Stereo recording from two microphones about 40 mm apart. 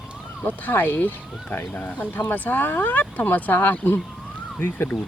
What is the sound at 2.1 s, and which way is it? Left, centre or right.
Speech, left.